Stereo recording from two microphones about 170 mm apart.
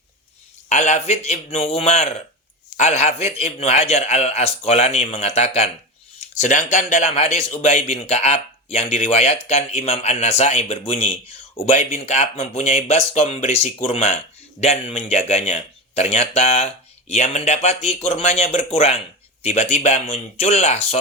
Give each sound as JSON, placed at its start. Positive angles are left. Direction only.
{"t": 0.7, "sound": "a man's voice", "side_deg": 40}